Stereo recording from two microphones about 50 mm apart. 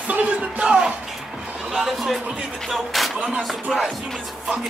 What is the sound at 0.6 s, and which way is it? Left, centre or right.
Speech, centre.